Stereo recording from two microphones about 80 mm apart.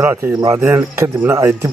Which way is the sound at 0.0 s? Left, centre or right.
Right.